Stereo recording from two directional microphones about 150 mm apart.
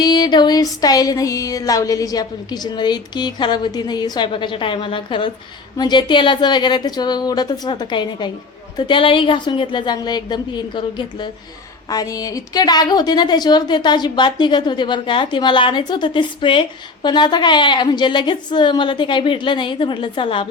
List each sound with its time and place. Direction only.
0.0 s music: 30° left (ahead or behind)
8.9 s a woman's voice: 35° left (ahead or behind)